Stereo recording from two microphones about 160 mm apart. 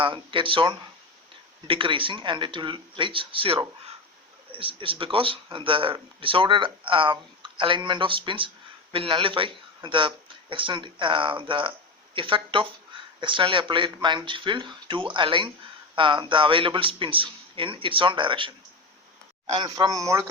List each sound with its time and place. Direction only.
0.0 s speech: 30° right (ahead or behind)
19.5 s speech: 25° right (ahead or behind)